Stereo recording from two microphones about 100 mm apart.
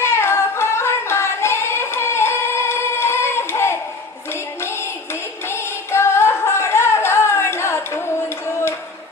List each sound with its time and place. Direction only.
0.0 s singing: 25° left (ahead or behind)
5.5 s singing: 25° left (ahead or behind)